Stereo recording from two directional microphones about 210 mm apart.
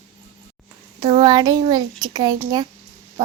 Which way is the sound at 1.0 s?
20° right (ahead or behind).